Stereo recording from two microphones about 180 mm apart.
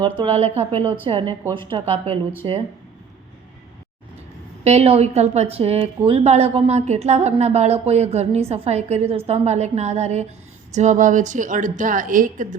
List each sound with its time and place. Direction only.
0.2 s a woman's voice: 35° right (ahead or behind)
2.4 s a woman's voice: 25° right (ahead or behind)
4.6 s a woman's voice: 35° right (ahead or behind)